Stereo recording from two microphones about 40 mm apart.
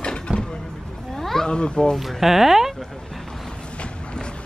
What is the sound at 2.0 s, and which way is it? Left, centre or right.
Speech, centre.